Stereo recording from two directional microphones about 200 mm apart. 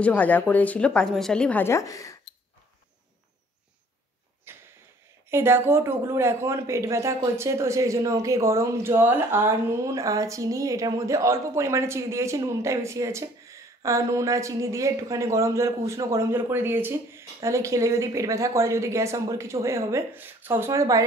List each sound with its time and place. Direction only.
0.0 s speech: 10° left (ahead or behind)
4.5 s a sound: 10° right (ahead or behind)
5.3 s speech: 10° right (ahead or behind)